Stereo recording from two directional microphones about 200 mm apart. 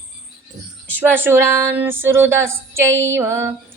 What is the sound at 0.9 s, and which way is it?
Speech, 10° right (ahead or behind).